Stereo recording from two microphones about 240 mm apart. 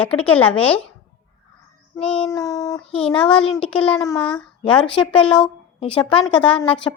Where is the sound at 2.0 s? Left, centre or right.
Centre.